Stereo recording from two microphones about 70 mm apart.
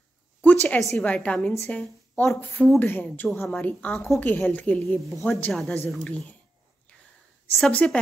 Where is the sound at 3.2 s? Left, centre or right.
Centre.